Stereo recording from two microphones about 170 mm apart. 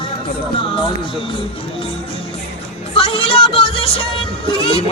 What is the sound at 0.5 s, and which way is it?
Music, 30° left (ahead or behind).